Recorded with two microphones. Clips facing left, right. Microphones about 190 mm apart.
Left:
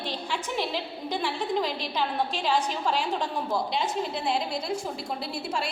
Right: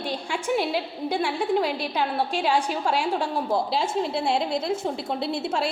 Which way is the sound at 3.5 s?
25° right (ahead or behind).